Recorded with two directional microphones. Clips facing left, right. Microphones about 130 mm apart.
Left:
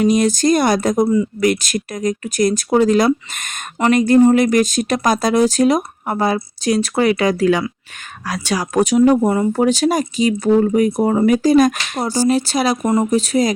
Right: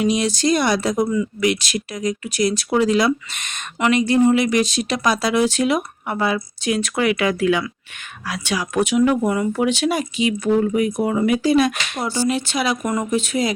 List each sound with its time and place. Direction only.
0.0 s speech: 45° left (ahead or behind)
1.0 s speech: 35° left (ahead or behind)
1.4 s speech: 45° left (ahead or behind)